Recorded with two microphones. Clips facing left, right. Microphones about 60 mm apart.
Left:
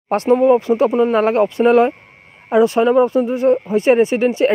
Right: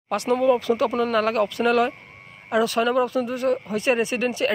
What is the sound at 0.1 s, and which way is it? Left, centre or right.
A woman's voice, left.